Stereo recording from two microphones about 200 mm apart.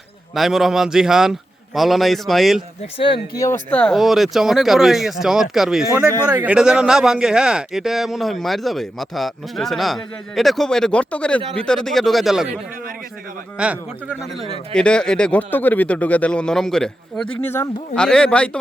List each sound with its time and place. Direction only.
0.3 s speech: centre (ahead or behind)
3.0 s speech: 25° left (ahead or behind)
3.4 s speech: 10° left (ahead or behind)
13.6 s speech: 5° right (ahead or behind)